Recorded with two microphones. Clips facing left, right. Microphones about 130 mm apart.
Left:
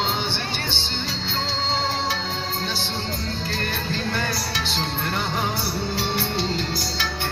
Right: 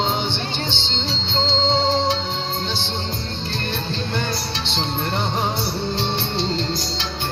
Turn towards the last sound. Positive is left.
turn(degrees=-25)  # may be behind; listen again after turning